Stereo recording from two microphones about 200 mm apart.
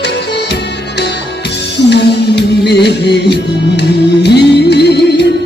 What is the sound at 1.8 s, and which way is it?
Music, 60° left (ahead or behind).